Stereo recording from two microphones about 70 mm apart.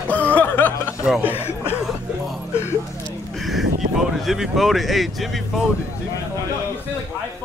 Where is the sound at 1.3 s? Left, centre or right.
Left.